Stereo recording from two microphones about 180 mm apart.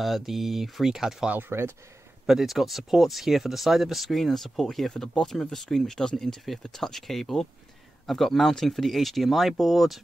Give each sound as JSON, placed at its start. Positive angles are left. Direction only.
{"t": 0.0, "sound": "speech", "side_deg": 0}